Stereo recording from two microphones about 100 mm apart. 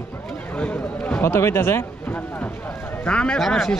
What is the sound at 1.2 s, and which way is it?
Speech, 25° left (ahead or behind).